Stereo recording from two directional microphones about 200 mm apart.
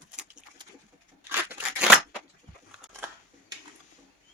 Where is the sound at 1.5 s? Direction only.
5° right (ahead or behind).